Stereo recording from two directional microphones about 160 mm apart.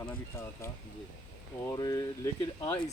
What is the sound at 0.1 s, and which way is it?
Speech, 15° left (ahead or behind).